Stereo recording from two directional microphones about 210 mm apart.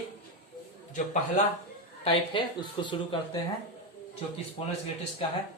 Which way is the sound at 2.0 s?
25° left (ahead or behind).